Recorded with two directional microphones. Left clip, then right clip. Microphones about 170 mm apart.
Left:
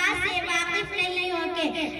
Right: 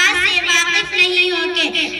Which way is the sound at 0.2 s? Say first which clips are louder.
Right 11 dB; 45° left (ahead or behind).